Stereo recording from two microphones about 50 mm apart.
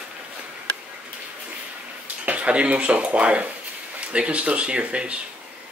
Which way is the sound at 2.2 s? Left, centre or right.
Right.